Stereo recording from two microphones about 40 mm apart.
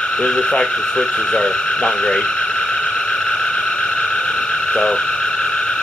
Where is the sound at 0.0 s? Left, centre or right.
Left.